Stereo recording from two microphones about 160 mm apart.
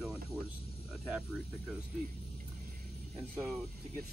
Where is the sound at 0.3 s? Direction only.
10° right (ahead or behind).